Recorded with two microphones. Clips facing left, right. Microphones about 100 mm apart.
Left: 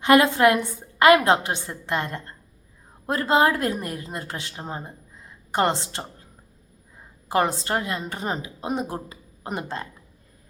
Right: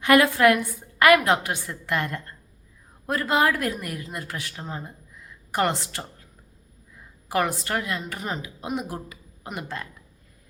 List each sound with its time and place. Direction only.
0.0 s a woman's voice: 25° left (ahead or behind)